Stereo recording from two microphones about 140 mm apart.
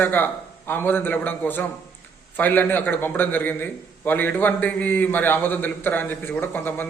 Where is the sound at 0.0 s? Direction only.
15° left (ahead or behind).